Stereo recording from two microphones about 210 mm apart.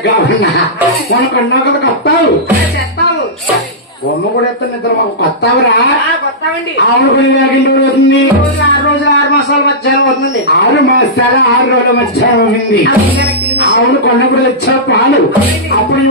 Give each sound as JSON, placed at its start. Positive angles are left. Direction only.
{"t": 0.0, "sound": "speech", "side_deg": 55}
{"t": 5.4, "sound": "a man's voice", "side_deg": 50}
{"t": 7.5, "sound": "speech", "side_deg": 55}
{"t": 9.5, "sound": "a man's voice", "side_deg": 55}